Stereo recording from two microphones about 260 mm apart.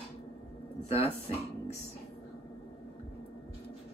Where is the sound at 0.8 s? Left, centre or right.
Left.